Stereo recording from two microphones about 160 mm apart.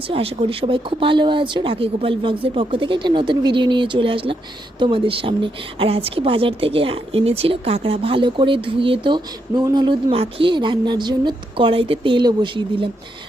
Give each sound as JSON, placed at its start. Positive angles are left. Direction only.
{"t": 0.1, "sound": "speech", "side_deg": -35}